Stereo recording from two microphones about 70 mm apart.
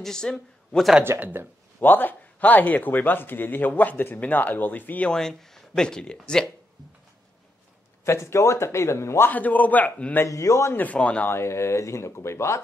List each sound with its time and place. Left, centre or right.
0.0 s speech: centre
1.2 s speech: right
1.8 s speech: left
5.1 s speech: centre
8.0 s speech: left
9.3 s speech: left
10.2 s a man's voice: left
10.8 s speech: centre
11.2 s speech: left